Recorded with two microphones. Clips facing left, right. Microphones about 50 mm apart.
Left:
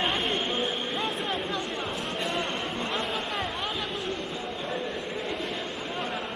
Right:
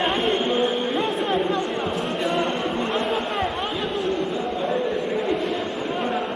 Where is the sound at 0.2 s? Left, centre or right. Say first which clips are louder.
Right 7 dB; right.